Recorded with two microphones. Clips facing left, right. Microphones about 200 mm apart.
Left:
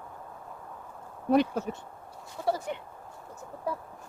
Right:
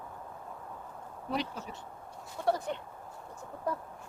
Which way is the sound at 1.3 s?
50° left (ahead or behind).